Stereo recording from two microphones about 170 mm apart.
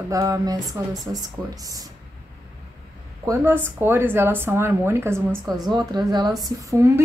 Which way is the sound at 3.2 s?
15° right (ahead or behind).